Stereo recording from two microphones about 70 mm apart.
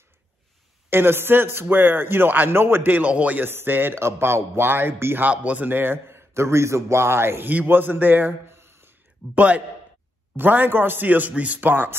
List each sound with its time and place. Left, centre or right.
0.8 s a man's voice: right
3.4 s a man's voice: right
5.2 s speech: centre
5.7 s a man's voice: right
9.3 s a man's voice: right